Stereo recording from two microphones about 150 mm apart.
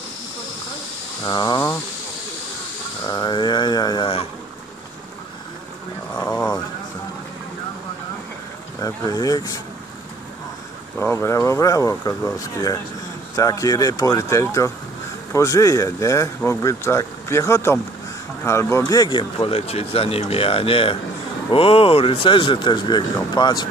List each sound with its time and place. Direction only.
1.2 s speech: 25° left (ahead or behind)
3.1 s speech: 30° left (ahead or behind)
8.8 s speech: 25° left (ahead or behind)
11.0 s speech: 15° left (ahead or behind)